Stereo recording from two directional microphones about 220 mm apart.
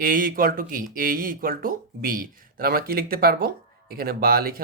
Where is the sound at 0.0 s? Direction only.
40° right (ahead or behind).